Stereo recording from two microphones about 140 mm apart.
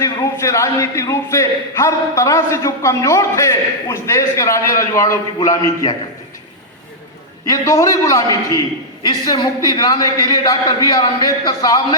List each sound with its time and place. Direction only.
0.0 s a man's voice: 20° left (ahead or behind)
7.4 s a man's voice: 25° left (ahead or behind)